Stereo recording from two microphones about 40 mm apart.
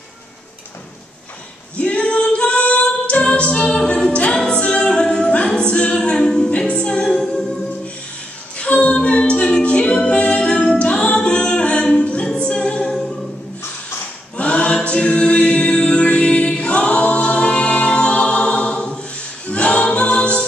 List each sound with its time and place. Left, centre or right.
1.8 s singing: left
4.6 s a capella: left
6.7 s music: left
8.5 s singing: left
8.9 s a capella: left
10.8 s music: left
12.0 s a capella: left
12.4 s music: left
14.3 s a capella: left